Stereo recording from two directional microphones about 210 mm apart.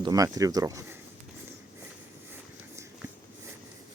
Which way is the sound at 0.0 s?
15° right (ahead or behind).